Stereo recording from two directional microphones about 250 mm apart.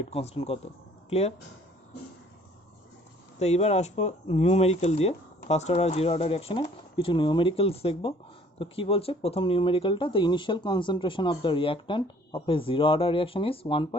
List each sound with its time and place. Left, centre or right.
0.0 s speech: left
3.3 s speech: left